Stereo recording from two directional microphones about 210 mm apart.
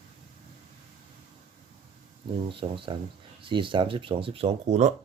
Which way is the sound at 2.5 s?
25° right (ahead or behind).